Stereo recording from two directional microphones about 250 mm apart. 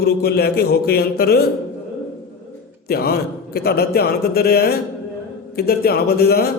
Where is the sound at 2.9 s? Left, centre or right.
Left.